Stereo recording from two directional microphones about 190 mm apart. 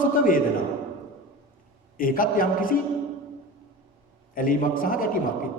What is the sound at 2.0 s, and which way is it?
Speech, 45° left (ahead or behind).